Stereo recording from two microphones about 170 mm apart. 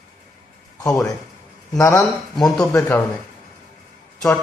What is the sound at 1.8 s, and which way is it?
Speech, 15° left (ahead or behind).